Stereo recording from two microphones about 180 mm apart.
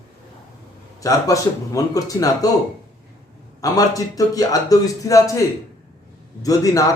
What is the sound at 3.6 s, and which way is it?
A man's voice, 20° left (ahead or behind).